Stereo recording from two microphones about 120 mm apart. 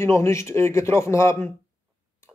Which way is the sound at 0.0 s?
25° left (ahead or behind).